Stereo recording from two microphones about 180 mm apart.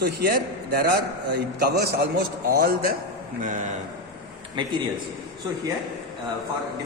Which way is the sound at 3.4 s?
45° right (ahead or behind).